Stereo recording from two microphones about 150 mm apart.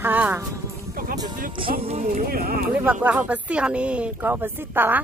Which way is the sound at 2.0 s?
70° right (ahead or behind).